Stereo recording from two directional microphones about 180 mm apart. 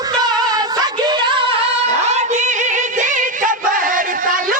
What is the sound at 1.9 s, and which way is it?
Music, 40° right (ahead or behind).